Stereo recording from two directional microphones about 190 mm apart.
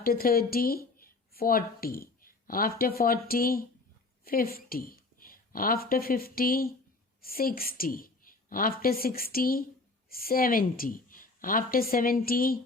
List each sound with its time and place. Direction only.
0.0 s a woman's voice: 50° left (ahead or behind)